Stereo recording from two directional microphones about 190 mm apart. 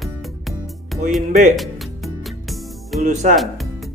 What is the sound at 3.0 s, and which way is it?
Speech, 40° right (ahead or behind).